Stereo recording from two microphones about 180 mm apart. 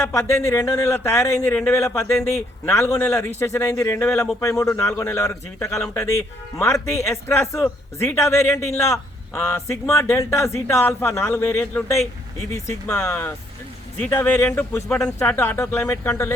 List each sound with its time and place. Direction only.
0.0 s speech: 15° left (ahead or behind)